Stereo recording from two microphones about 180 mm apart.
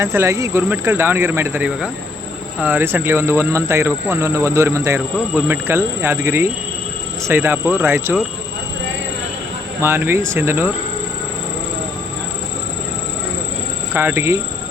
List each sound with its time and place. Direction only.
0.0 s speech: 15° right (ahead or behind)
9.8 s speech: 10° right (ahead or behind)
13.9 s speech: 10° right (ahead or behind)